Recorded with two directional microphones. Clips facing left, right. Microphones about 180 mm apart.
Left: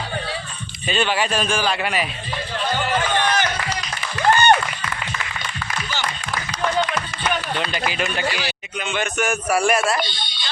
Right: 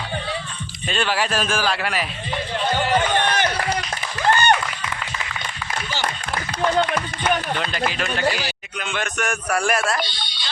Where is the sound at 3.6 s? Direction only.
50° right (ahead or behind).